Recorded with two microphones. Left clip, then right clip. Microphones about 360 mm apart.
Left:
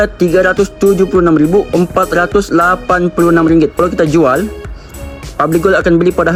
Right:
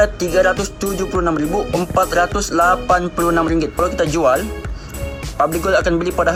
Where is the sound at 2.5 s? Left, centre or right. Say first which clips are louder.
Left 1 dB; left.